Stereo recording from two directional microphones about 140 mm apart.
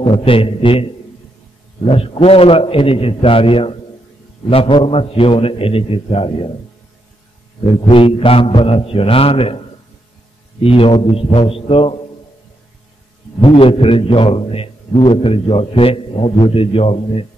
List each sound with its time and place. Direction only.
0.2 s a man's voice: 40° left (ahead or behind)
1.9 s a man's voice: 40° left (ahead or behind)
7.9 s a man's voice: 40° left (ahead or behind)
10.6 s a man's voice: 40° left (ahead or behind)
13.4 s a man's voice: 40° left (ahead or behind)